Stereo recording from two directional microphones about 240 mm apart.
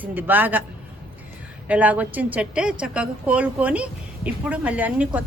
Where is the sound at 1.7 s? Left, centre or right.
Centre.